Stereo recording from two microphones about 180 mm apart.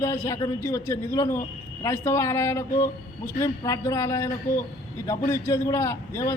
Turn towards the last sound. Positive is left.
turn(degrees=15)  # may be behind; listen again after turning